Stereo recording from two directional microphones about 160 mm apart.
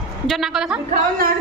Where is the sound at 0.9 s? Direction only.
65° right (ahead or behind).